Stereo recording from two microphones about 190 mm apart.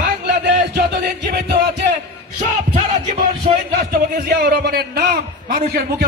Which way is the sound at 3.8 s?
55° right (ahead or behind).